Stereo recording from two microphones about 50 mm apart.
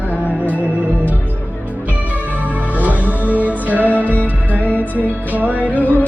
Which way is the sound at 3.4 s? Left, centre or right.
Right.